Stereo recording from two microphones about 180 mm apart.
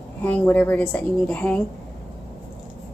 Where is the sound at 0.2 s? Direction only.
10° left (ahead or behind).